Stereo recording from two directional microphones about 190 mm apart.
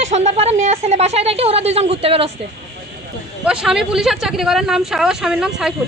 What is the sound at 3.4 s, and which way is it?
Speech, 5° right (ahead or behind).